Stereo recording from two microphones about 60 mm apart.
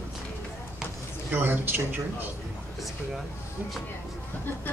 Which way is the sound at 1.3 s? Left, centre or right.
Right.